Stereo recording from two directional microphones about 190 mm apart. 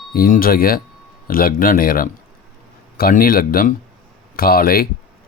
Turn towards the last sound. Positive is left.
turn(degrees=50)  # may be behind; listen again after turning